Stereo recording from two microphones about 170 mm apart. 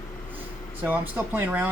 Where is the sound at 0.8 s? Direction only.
10° right (ahead or behind).